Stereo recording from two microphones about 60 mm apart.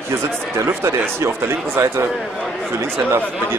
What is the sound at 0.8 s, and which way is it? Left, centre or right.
A man's voice, right.